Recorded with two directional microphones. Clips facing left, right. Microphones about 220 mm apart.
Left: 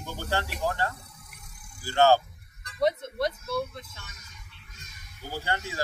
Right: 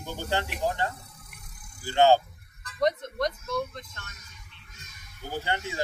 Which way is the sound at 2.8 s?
5° left (ahead or behind).